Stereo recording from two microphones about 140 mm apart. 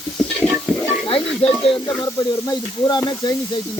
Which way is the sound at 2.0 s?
25° left (ahead or behind).